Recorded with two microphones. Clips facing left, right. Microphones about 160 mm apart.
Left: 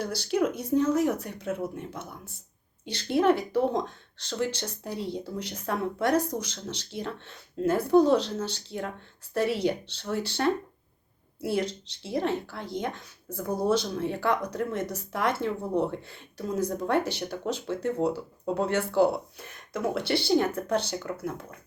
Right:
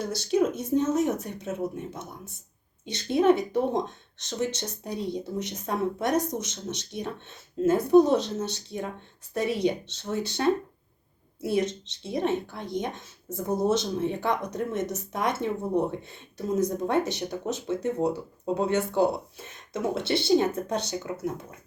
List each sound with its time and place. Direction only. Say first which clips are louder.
0.0 s speech: right 2 dB; 25° right (ahead or behind)